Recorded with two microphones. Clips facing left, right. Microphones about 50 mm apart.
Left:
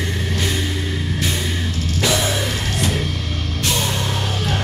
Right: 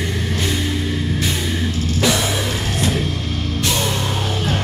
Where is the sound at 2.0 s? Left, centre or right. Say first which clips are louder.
Even; centre.